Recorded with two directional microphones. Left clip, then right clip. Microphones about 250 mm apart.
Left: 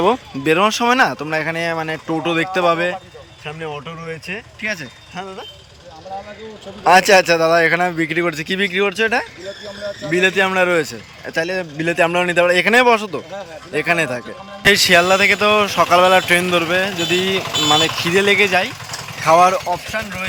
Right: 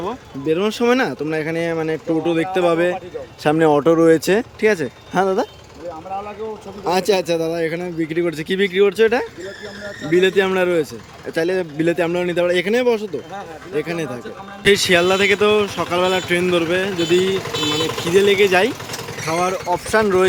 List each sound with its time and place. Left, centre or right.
0.4 s a man's voice: centre
3.4 s speech: right
6.8 s a man's voice: centre
19.9 s speech: centre